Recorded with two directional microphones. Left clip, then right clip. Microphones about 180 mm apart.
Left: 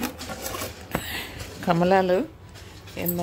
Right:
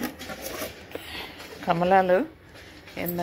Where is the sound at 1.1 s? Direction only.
50° left (ahead or behind); by 2.3 s 25° left (ahead or behind).